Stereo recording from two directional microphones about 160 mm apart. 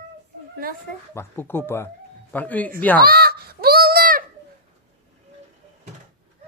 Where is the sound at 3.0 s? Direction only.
75° right (ahead or behind).